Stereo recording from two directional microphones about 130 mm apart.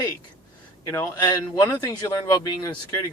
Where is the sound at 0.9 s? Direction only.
20° left (ahead or behind).